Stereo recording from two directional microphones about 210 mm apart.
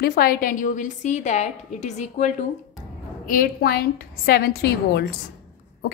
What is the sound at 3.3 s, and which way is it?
A woman's voice, 45° left (ahead or behind).